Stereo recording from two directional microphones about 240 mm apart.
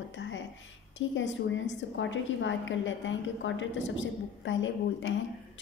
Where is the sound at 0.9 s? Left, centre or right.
Left.